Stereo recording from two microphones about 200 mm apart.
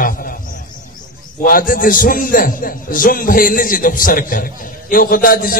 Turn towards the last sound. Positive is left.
turn(degrees=45)  # may be behind; listen again after turning